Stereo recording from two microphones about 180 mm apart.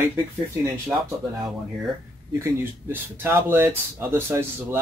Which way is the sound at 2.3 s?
15° right (ahead or behind).